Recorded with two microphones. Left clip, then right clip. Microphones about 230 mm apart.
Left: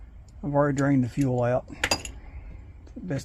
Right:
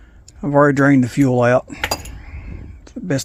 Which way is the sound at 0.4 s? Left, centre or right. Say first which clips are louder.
Right 11 dB; right.